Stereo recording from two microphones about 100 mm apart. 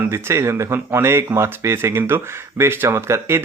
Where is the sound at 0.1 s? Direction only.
25° right (ahead or behind).